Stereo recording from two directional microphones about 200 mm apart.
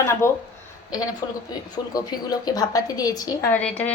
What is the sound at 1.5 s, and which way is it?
A woman's voice, 20° left (ahead or behind).